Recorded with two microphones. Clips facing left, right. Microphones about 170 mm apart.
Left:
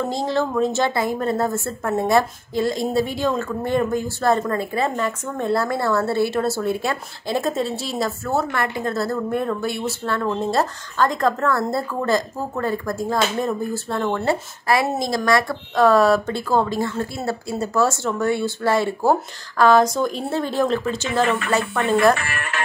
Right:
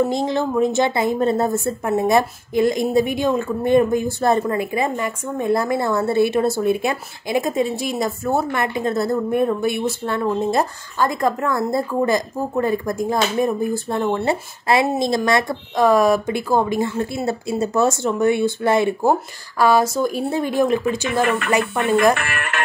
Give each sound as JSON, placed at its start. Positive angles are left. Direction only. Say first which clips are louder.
{"t": 0.0, "sound": "a woman's voice", "louder": "right 3 dB", "side_deg": -15}
{"t": 19.6, "sound": "a woman's voice", "louder": "left 1 dB", "side_deg": -10}
{"t": 22.1, "sound": "speech", "louder": "right 2 dB", "side_deg": -65}